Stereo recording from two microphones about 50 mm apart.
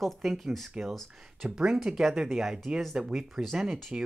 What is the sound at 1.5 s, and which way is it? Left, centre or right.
Speech, centre.